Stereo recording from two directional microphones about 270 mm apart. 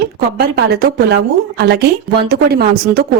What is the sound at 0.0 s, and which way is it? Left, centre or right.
A woman's voice, right.